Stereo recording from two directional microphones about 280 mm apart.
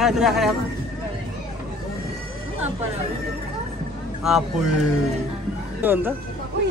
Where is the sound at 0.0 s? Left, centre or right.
Centre.